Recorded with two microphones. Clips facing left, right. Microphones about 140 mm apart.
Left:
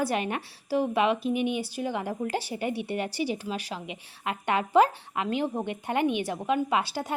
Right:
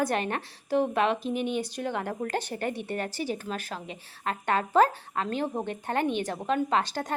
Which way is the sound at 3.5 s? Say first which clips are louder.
Left 1 dB; 50° right (ahead or behind).